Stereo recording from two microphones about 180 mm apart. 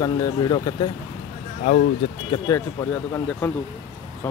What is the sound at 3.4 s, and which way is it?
Speech, 10° left (ahead or behind).